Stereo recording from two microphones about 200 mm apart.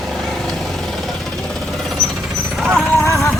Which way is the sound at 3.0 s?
15° left (ahead or behind).